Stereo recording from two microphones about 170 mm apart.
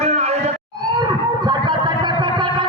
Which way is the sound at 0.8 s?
25° right (ahead or behind).